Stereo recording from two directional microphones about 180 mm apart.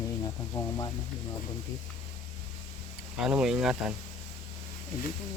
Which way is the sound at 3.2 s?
5° right (ahead or behind).